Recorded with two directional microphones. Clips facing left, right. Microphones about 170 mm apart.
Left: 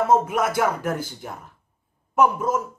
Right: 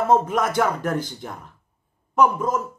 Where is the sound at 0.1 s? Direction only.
5° left (ahead or behind).